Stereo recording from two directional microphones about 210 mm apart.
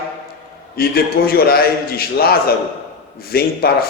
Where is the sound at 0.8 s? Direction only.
45° left (ahead or behind).